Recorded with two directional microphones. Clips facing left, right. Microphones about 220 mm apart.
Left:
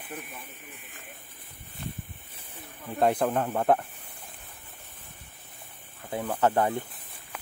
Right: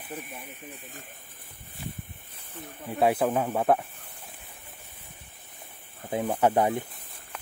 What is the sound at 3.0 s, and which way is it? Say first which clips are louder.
Speech: right 1 dB; 5° right (ahead or behind).